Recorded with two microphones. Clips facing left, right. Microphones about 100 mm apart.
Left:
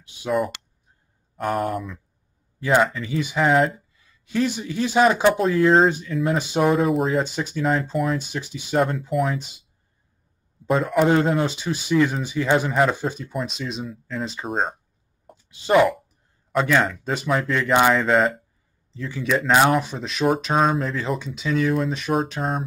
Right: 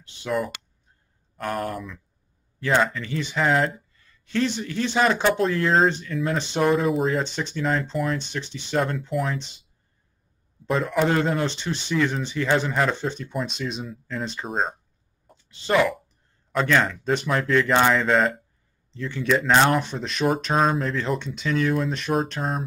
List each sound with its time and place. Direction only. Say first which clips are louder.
1.3 s speech: left 4 dB; 5° left (ahead or behind)
10.7 s speech: left 3 dB; centre (ahead or behind)
15.4 s speech: left 4 dB; 15° left (ahead or behind)
16.5 s speech: left 1 dB; 5° left (ahead or behind)